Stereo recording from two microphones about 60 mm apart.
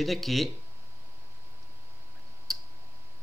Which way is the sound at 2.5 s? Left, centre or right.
Centre.